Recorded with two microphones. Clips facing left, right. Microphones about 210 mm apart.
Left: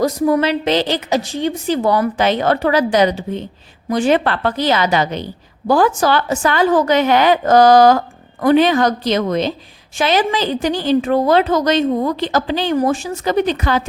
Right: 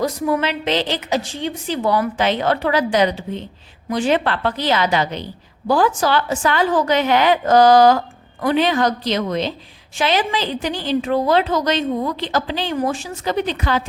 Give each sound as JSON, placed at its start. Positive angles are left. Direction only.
{"t": 0.0, "sound": "a woman's voice", "side_deg": 40}